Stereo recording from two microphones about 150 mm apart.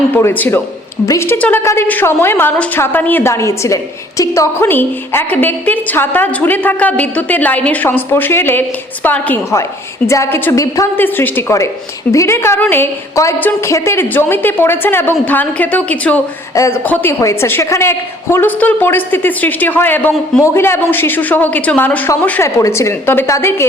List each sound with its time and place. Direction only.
0.1 s a woman's voice: 15° left (ahead or behind)